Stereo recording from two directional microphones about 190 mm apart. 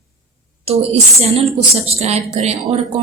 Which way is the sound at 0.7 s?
30° right (ahead or behind).